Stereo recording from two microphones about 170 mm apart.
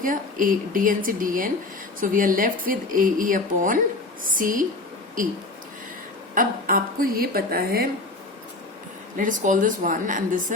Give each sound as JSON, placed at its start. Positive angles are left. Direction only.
{"t": 0.0, "sound": "a woman's voice", "side_deg": -55}
{"t": 9.1, "sound": "speech", "side_deg": -50}